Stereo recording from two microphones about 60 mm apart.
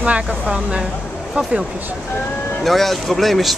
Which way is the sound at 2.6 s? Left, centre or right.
Centre.